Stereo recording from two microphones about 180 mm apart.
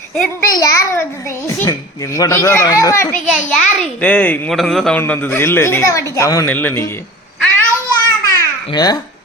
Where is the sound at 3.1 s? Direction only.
5° left (ahead or behind).